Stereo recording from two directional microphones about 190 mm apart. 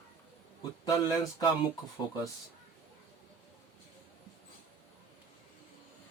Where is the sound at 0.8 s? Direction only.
20° left (ahead or behind).